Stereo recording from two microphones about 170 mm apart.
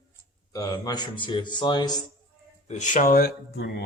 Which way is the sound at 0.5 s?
20° left (ahead or behind).